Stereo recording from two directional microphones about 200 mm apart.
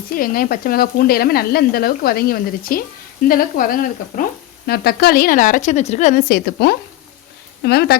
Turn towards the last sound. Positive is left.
turn(degrees=50)  # may be behind; listen again after turning